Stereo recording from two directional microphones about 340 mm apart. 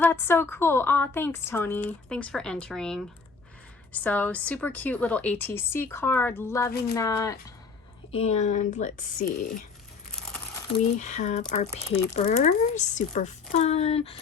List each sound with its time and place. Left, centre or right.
0.0 s a woman's voice: centre; by 9.5 s left
10.9 s speech: left